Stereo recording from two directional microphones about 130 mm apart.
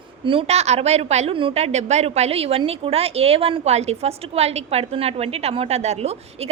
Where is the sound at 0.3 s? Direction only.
50° right (ahead or behind).